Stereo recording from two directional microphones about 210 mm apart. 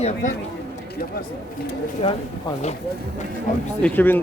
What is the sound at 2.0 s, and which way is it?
Speech, 25° left (ahead or behind).